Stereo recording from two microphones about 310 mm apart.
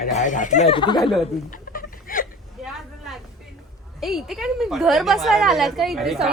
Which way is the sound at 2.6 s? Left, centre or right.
Centre.